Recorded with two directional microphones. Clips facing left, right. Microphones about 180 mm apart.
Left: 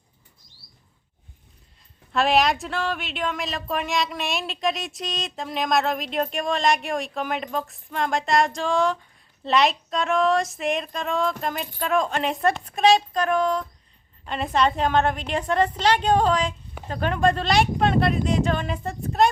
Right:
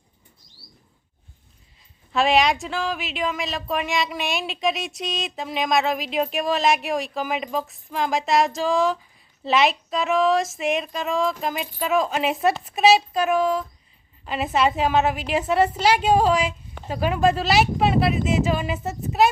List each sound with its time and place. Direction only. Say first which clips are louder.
2.1 s a woman's voice: right 1 dB; centre (ahead or behind)